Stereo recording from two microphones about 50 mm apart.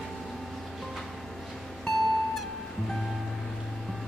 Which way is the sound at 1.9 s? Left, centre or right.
Centre.